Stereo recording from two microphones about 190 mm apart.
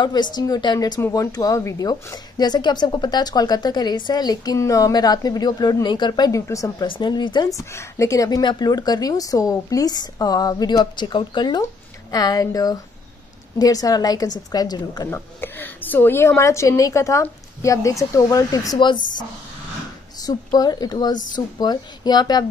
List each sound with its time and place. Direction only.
0.0 s a woman's voice: 20° left (ahead or behind)